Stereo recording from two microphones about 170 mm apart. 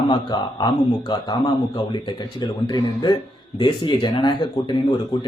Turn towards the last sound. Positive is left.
turn(degrees=30)  # may be behind; listen again after turning